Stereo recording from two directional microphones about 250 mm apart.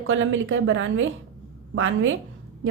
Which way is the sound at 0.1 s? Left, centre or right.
Right.